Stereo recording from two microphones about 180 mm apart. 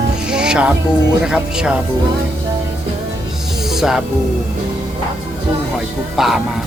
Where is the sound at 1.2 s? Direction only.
5° right (ahead or behind).